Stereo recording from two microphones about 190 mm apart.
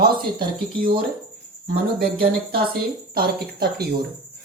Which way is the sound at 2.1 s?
50° right (ahead or behind).